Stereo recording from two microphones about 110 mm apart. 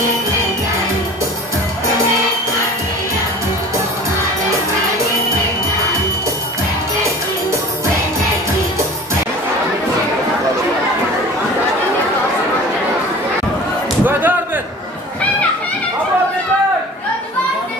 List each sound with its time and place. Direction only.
14.0 s slam: 15° right (ahead or behind)